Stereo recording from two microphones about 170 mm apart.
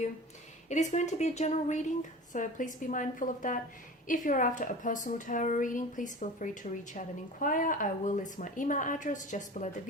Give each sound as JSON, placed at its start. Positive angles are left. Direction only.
{"t": 0.7, "sound": "a woman's voice", "side_deg": 45}